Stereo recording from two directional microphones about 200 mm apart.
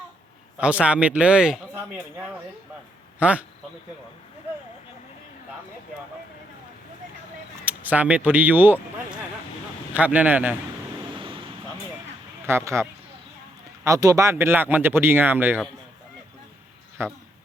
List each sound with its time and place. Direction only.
0.5 s speech: 5° right (ahead or behind)
3.2 s a man's voice: 5° right (ahead or behind)
7.6 s speech: 10° right (ahead or behind)
11.1 s waves: 25° right (ahead or behind)
12.5 s speech: 15° right (ahead or behind)
17.0 s speech: 10° right (ahead or behind)